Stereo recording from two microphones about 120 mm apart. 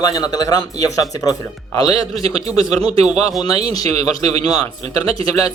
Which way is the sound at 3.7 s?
30° left (ahead or behind).